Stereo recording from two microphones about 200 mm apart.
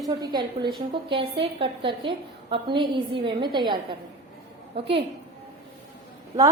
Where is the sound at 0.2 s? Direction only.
20° right (ahead or behind).